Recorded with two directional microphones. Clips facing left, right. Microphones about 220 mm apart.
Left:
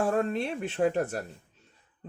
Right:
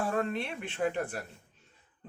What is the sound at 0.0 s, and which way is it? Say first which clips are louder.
A man's voice: left 4 dB; 40° left (ahead or behind).